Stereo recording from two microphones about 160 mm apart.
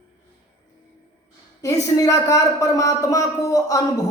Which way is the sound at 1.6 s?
20° left (ahead or behind).